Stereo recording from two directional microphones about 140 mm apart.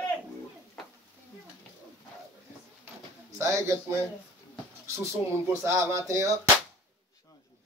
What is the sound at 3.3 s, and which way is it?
A man's voice, 20° right (ahead or behind).